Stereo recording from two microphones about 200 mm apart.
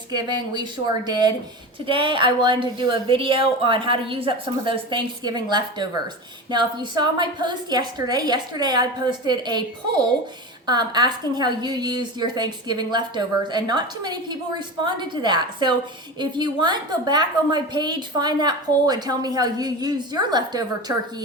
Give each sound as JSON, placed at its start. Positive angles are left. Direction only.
{"t": 0.1, "sound": "a woman's voice", "side_deg": -20}